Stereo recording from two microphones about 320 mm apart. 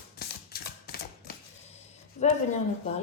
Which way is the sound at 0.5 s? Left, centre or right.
Left.